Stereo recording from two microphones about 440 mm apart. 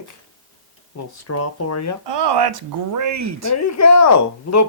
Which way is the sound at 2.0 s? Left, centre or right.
Right.